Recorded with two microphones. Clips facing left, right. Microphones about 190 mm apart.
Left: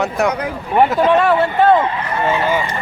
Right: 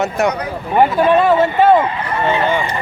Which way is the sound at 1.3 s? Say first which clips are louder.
Right 1 dB; 20° right (ahead or behind).